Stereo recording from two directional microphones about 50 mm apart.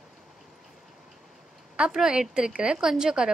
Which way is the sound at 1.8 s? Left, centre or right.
Centre.